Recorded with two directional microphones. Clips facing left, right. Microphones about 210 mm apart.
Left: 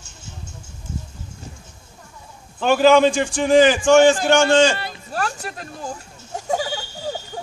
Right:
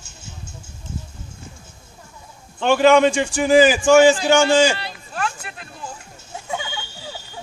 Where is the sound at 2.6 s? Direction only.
Centre (ahead or behind).